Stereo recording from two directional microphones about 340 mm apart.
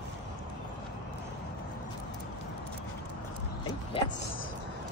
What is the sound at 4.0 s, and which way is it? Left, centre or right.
Music, centre.